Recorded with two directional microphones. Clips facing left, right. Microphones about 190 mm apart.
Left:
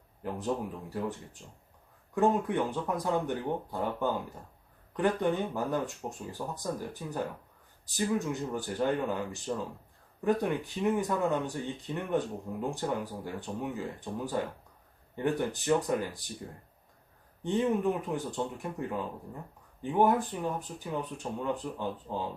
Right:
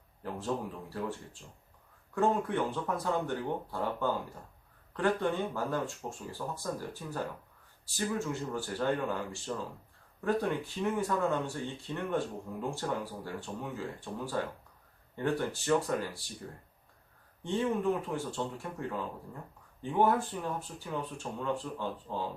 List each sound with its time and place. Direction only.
0.2 s speech: 15° left (ahead or behind)
2.1 s speech: 15° left (ahead or behind)
17.4 s speech: 20° left (ahead or behind)